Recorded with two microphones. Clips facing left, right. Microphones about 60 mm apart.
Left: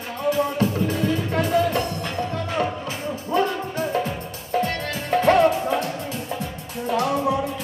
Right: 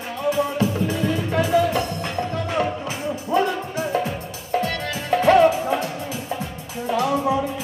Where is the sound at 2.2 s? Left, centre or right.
Right.